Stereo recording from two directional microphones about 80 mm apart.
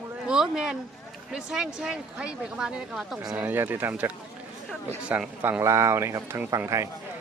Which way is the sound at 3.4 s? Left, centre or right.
Right.